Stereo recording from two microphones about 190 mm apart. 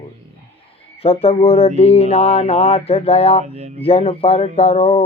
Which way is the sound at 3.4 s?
35° right (ahead or behind).